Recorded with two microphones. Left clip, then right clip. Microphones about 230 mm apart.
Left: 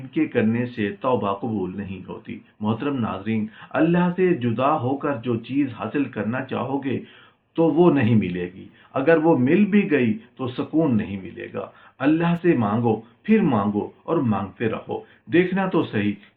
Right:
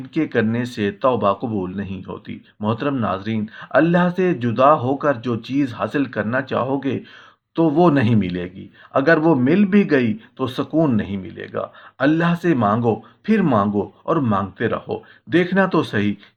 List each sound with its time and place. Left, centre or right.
0.1 s speech: right
7.5 s speech: right